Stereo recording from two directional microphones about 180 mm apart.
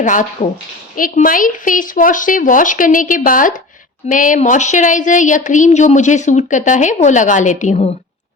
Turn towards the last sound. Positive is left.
turn(degrees=40)  # may be behind; listen again after turning